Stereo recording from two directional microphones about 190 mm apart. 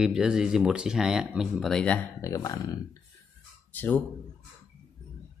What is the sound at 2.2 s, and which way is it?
Speech, 15° left (ahead or behind).